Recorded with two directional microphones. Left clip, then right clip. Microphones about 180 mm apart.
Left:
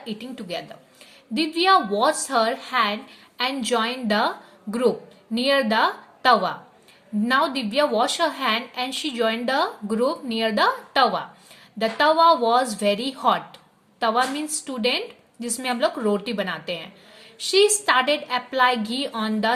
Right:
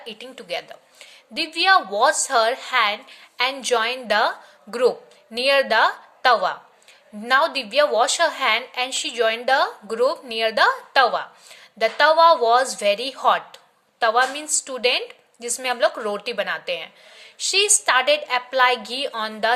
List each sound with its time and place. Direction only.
0.0 s a woman's voice: 20° right (ahead or behind)